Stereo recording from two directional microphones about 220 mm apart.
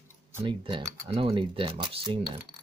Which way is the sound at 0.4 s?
20° right (ahead or behind).